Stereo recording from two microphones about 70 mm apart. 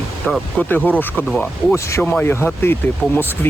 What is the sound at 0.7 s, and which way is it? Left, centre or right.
Speech, left.